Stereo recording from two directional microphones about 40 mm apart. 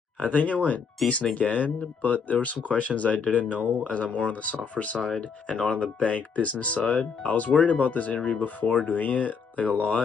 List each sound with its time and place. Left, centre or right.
0.2 s speech: left